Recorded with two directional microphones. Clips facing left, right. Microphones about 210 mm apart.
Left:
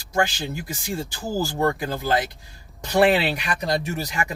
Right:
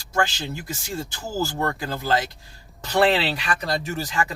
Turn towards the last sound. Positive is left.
turn(degrees=15)  # may be behind; listen again after turning